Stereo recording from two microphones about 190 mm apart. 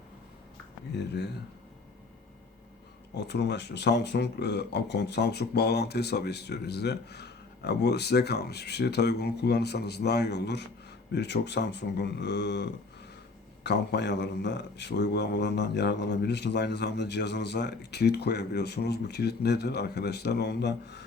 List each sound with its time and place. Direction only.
0.9 s speech: 60° left (ahead or behind)
3.2 s speech: 65° left (ahead or behind)
13.7 s speech: 65° left (ahead or behind)